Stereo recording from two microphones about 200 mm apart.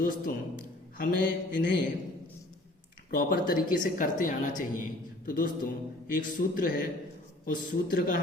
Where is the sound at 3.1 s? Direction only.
45° left (ahead or behind).